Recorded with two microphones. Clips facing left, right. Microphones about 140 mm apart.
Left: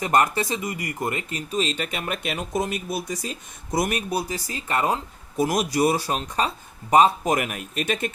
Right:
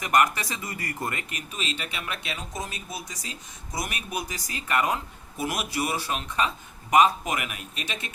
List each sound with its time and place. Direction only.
0.0 s speech: 30° left (ahead or behind); by 4.0 s 50° left (ahead or behind)
4.1 s speech: 30° left (ahead or behind); by 8.1 s 50° left (ahead or behind)